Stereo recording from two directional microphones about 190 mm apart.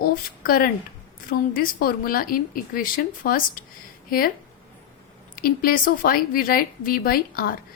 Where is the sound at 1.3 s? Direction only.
50° left (ahead or behind).